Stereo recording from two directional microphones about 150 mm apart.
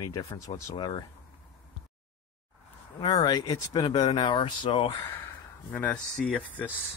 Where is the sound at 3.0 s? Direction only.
30° left (ahead or behind).